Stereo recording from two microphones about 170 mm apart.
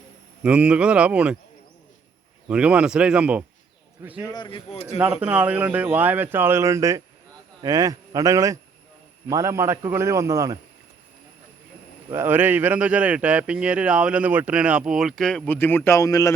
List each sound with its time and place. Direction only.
0.4 s speech: 5° right (ahead or behind)
2.5 s speech: 5° right (ahead or behind)
4.3 s speech: 30° left (ahead or behind)
4.9 s speech: 10° right (ahead or behind)
12.1 s speech: 15° right (ahead or behind); by 16.3 s 20° left (ahead or behind)